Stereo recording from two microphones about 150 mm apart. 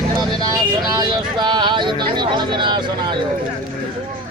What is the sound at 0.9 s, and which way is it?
Speech, 30° right (ahead or behind).